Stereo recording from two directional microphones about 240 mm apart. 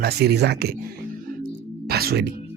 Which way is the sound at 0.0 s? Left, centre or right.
Right.